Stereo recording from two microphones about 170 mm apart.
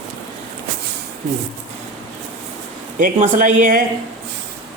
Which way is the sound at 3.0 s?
50° right (ahead or behind).